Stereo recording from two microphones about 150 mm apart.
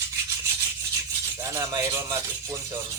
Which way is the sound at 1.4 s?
20° right (ahead or behind).